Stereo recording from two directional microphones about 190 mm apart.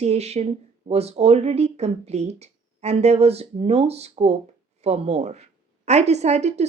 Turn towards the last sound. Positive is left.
turn(degrees=-35)  # may be behind; listen again after turning